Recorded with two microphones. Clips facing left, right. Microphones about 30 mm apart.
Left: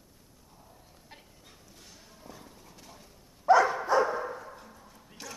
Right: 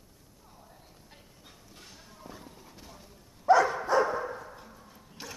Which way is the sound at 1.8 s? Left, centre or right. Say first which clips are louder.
Right 4 dB; right.